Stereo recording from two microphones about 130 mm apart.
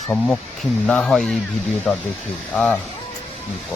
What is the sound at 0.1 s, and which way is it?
Speech, 25° left (ahead or behind).